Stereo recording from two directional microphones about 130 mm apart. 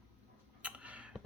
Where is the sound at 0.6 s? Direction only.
10° right (ahead or behind).